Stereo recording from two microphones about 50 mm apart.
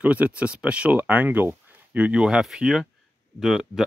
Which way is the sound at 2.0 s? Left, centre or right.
Right.